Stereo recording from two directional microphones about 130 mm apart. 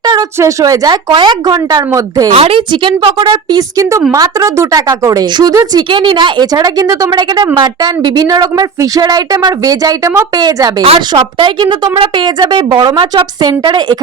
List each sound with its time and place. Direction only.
0.0 s a sound: 30° right (ahead or behind)
0.3 s speech: 25° right (ahead or behind)
1.1 s speech: 35° right (ahead or behind)
1.9 s speech: 25° right (ahead or behind)
2.3 s speech: 45° right (ahead or behind); by 10.8 s 30° right (ahead or behind)
10.8 s speech: 50° right (ahead or behind)